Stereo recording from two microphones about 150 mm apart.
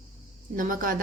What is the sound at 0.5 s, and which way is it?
Speech, 65° right (ahead or behind).